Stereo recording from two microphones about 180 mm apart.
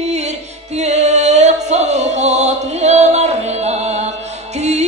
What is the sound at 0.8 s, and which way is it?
Music, 40° right (ahead or behind).